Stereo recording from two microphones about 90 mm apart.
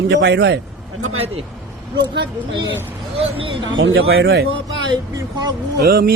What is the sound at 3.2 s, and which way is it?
Speech, 85° right.